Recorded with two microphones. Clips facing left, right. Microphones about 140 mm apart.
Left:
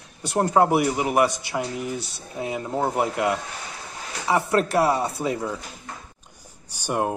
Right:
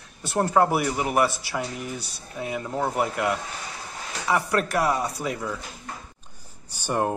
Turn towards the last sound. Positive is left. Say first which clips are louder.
# even
turn(degrees=15)  # may be behind; listen again after turning